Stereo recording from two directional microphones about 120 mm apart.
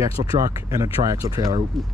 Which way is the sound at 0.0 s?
30° right (ahead or behind).